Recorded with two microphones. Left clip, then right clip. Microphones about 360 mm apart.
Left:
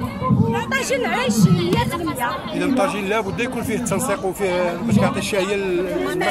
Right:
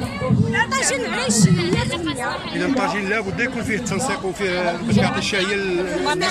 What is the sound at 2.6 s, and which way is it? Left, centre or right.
Speech, centre.